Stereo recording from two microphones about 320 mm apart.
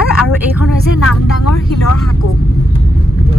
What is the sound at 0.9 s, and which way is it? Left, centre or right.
Speech, left.